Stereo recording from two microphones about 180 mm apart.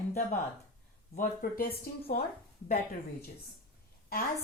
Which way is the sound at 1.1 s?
50° left (ahead or behind).